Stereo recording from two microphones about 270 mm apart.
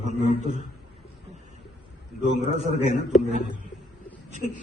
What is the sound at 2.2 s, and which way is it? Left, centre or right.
Speech, right.